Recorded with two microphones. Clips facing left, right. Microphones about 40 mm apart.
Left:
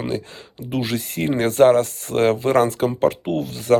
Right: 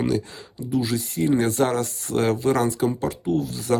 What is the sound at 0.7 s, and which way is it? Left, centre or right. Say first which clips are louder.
Speech: even; left.